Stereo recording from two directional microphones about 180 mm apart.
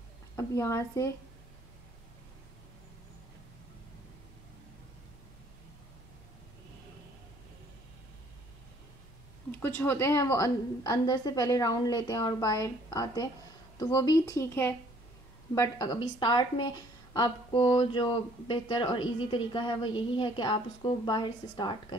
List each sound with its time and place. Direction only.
0.4 s a woman's voice: 15° left (ahead or behind)
9.5 s speech: 10° left (ahead or behind)